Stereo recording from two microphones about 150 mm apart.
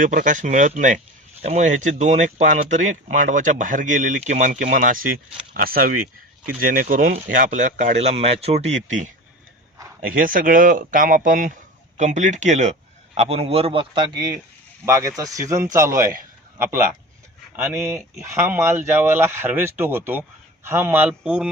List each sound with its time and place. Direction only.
0.0 s speech: 60° right (ahead or behind)
10.0 s speech: 70° right (ahead or behind); by 12.7 s 50° right (ahead or behind)
13.1 s speech: 40° right (ahead or behind); by 16.1 s 20° right (ahead or behind)
17.6 s speech: 10° right (ahead or behind)